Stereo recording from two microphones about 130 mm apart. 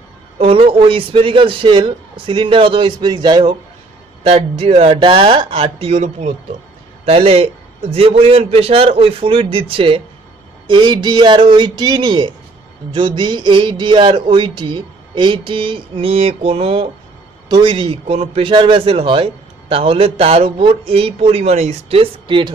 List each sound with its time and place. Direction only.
0.4 s speech: 45° right (ahead or behind)
4.2 s a man's voice: 50° right (ahead or behind)
7.1 s a man's voice: 50° right (ahead or behind)